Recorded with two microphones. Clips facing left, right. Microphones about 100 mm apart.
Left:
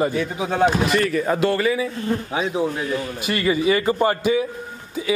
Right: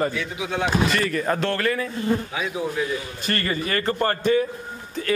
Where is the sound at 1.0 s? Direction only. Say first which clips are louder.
Left 3 dB; centre (ahead or behind).